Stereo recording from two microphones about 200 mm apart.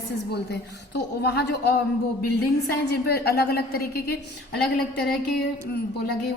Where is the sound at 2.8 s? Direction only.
55° left (ahead or behind).